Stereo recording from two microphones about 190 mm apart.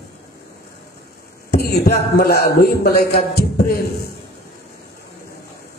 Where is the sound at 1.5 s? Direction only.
55° left (ahead or behind).